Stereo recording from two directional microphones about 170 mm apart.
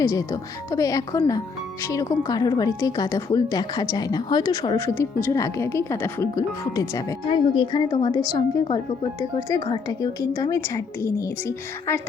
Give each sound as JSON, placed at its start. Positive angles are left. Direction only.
{"t": 0.0, "sound": "speech", "side_deg": 20}
{"t": 4.9, "sound": "speech", "side_deg": 15}